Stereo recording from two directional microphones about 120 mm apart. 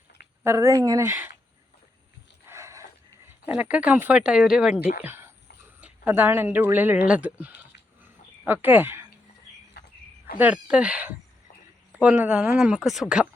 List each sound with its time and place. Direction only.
0.4 s speech: 25° right (ahead or behind)
2.5 s a sound: 25° right (ahead or behind)
3.4 s speech: 10° right (ahead or behind)
5.0 s speech: 20° right (ahead or behind)
10.3 s speech: 10° right (ahead or behind)